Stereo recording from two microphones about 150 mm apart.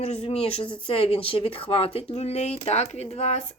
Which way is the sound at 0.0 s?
45° left (ahead or behind).